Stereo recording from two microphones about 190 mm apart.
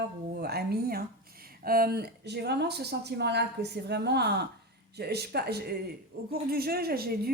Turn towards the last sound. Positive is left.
turn(degrees=-55)  # may be behind; listen again after turning